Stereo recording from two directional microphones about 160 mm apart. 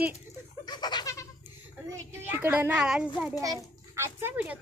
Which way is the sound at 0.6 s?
25° left (ahead or behind).